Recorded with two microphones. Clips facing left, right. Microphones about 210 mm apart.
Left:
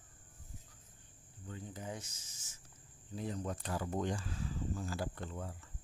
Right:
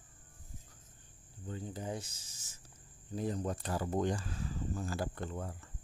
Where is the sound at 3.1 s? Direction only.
40° right (ahead or behind).